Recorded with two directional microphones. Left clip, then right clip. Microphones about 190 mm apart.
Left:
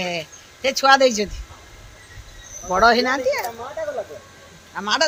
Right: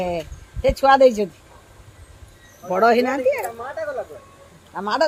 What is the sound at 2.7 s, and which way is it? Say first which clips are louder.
Speech: left 1 dB; 60° right (ahead or behind).